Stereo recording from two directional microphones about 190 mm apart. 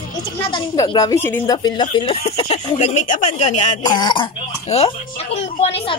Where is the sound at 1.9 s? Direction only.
30° left (ahead or behind).